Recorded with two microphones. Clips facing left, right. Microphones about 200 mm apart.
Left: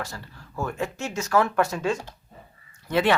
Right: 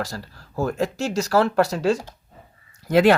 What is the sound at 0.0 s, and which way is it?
Speech, 35° right (ahead or behind).